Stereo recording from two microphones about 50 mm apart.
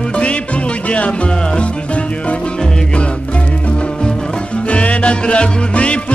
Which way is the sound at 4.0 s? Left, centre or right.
Centre.